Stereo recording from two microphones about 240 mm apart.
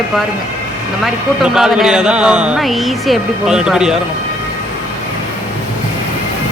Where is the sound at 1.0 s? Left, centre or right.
Centre.